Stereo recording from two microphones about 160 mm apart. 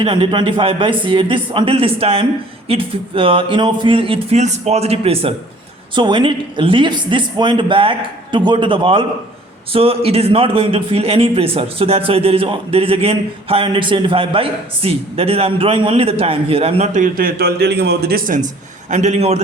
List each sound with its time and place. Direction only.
0.0 s a man's voice: 30° right (ahead or behind); by 18.4 s 60° right (ahead or behind)
18.9 s a man's voice: 45° right (ahead or behind)